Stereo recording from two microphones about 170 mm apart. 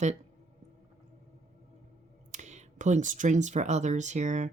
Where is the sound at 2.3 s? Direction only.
45° right (ahead or behind).